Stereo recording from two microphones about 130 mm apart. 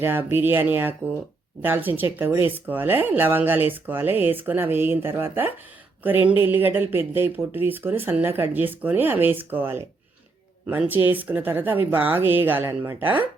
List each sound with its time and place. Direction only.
0.0 s speech: 15° right (ahead or behind)